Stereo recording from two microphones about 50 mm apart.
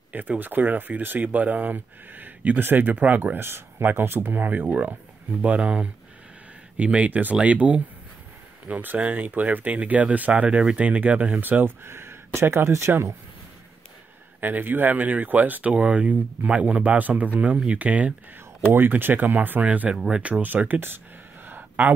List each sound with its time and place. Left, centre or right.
0.4 s speech: right
5.4 s speech: right
11.6 s speech: right
14.4 s speech: right
18.8 s speech: right
21.5 s a sound: right